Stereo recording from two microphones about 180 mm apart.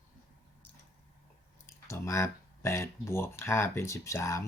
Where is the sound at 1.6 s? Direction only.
15° left (ahead or behind).